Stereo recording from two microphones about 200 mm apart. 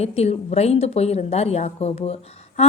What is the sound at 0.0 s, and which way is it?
A woman's voice, 30° left (ahead or behind).